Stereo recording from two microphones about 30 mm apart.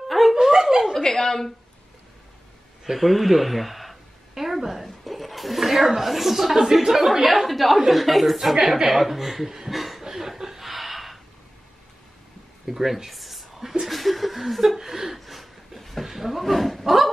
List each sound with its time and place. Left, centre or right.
0.1 s a sound: centre
0.4 s chuckle: centre
1.0 s a woman's voice: centre
2.8 s a sound: centre
4.8 s speech: centre
8.4 s speech: centre
9.7 s chuckle: centre
12.6 s a sound: centre
13.8 s chuckle: centre
14.8 s speech: centre
15.1 s a sound: centre
16.0 s speech: centre